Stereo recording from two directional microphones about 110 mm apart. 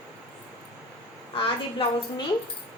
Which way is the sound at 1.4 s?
50° left (ahead or behind).